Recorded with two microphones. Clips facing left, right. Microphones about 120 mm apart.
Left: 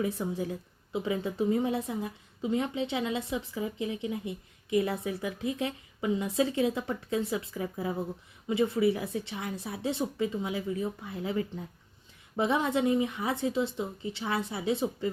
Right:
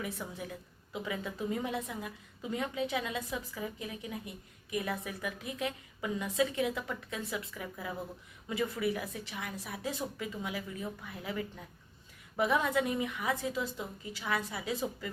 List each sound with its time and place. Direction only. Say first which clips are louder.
0.0 s a woman's voice: left 9 dB; 30° left (ahead or behind)